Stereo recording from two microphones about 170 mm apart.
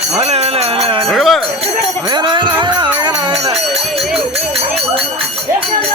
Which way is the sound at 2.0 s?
25° right (ahead or behind).